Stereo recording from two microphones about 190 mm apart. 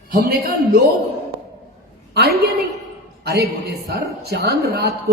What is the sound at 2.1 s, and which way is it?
A woman's voice, 55° right (ahead or behind).